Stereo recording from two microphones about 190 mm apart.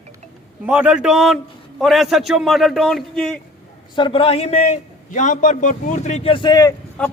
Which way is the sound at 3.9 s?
25° left (ahead or behind).